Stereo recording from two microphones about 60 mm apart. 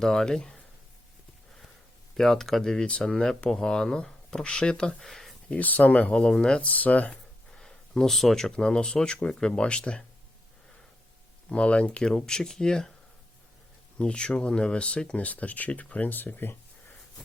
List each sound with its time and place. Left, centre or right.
0.0 s speech: centre
2.1 s speech: centre
5.5 s speech: left
6.6 s speech: left
7.5 s speech: centre
11.4 s speech: centre
14.0 s speech: centre; by 16.6 s left